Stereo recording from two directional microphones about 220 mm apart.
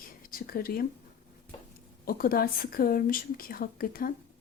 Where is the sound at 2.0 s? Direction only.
40° left (ahead or behind).